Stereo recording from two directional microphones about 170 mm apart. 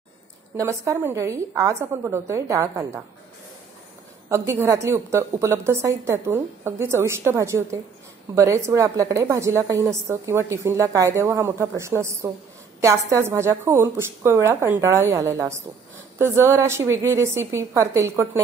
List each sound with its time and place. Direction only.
0.6 s a woman's voice: 15° right (ahead or behind)
4.3 s a woman's voice: 15° right (ahead or behind)